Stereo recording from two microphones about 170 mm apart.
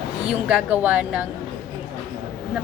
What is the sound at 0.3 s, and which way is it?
Speech, 5° right (ahead or behind).